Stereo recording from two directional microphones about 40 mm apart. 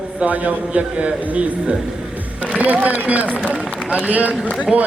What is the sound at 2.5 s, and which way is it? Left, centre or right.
A man's voice, right.